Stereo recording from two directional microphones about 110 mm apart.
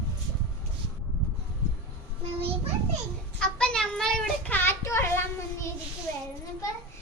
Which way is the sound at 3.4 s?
10° left (ahead or behind).